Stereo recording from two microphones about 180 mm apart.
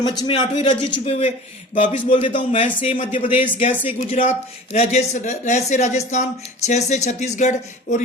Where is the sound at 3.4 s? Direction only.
45° left (ahead or behind).